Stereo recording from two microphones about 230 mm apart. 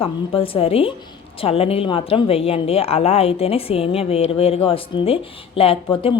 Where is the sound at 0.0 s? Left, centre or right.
Left.